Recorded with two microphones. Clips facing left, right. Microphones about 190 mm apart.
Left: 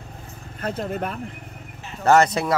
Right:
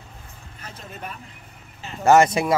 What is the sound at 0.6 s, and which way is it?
Speech, 60° left (ahead or behind).